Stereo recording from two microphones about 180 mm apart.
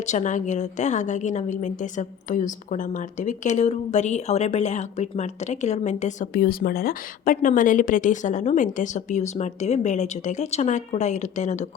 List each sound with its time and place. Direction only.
0.0 s a woman's voice: 40° left (ahead or behind)
6.3 s a woman's voice: 55° left (ahead or behind)